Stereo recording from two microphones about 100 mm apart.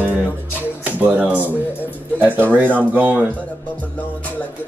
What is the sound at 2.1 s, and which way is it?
Music, 20° right (ahead or behind).